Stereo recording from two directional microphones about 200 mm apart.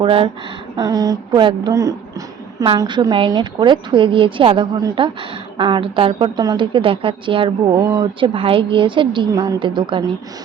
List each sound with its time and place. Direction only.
0.0 s a woman's voice: 25° right (ahead or behind)